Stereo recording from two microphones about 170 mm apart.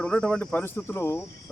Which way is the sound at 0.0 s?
5° left (ahead or behind).